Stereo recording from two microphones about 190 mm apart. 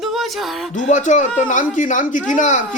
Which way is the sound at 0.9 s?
40° left (ahead or behind).